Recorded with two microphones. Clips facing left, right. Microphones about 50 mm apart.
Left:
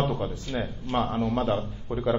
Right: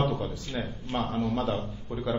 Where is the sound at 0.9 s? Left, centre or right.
Left.